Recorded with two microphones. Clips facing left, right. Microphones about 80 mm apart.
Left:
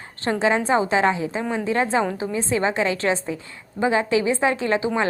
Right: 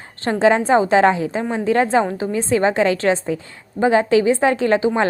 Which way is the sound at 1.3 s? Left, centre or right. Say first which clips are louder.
Right 4 dB; right.